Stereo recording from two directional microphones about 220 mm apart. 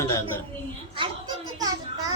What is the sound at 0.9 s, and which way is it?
Speech, 20° right (ahead or behind).